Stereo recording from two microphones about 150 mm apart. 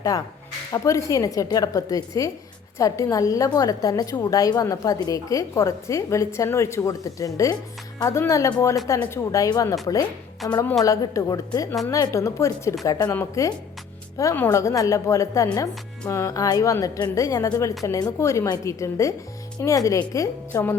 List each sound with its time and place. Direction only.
0.1 s a woman's voice: 20° left (ahead or behind)